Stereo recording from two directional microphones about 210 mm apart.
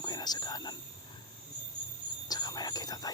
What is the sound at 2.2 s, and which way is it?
Whispering, 20° left (ahead or behind).